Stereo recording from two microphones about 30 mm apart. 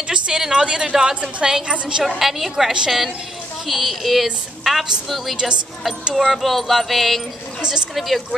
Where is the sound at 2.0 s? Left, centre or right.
Centre.